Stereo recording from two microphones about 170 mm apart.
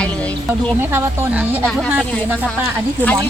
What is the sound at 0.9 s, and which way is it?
Speech, 15° right (ahead or behind).